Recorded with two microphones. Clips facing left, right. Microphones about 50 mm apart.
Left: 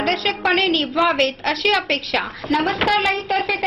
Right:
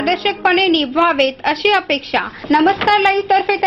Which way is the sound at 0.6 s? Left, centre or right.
Right.